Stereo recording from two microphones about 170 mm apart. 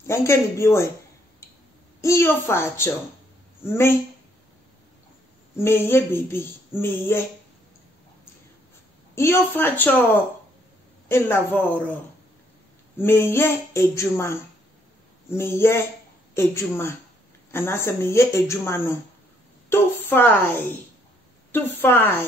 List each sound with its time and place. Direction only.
0.0 s speech: 15° left (ahead or behind)
2.0 s speech: 15° left (ahead or behind)
5.6 s speech: 15° left (ahead or behind)
9.1 s speech: 15° left (ahead or behind)
12.9 s speech: 15° left (ahead or behind)